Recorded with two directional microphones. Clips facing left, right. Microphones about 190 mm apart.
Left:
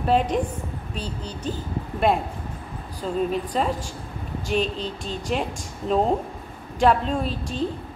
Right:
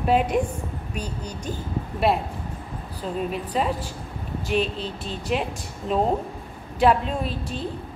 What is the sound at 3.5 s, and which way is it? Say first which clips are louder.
Speech: right 1 dB; 5° right (ahead or behind).